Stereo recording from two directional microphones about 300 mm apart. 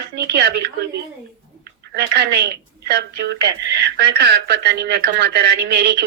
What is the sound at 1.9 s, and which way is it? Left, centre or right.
A woman's voice, right.